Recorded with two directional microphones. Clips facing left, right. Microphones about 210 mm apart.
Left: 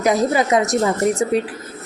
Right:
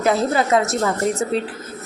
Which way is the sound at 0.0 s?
15° left (ahead or behind).